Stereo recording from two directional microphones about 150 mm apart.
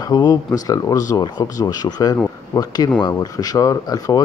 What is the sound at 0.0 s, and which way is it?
Speech, 25° left (ahead or behind).